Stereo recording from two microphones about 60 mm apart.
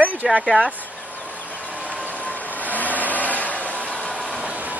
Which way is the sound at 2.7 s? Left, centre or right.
Left.